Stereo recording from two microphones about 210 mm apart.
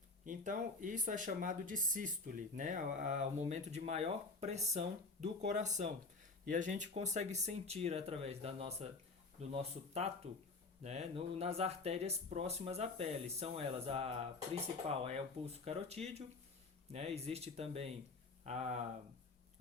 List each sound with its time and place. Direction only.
0.3 s speech: 40° right (ahead or behind)